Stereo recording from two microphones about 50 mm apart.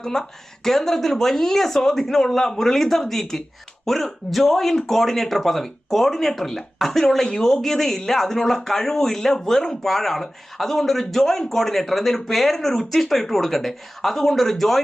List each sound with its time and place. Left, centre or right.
0.0 s speech: centre